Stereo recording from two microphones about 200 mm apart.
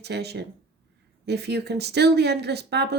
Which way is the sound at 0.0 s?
55° right (ahead or behind).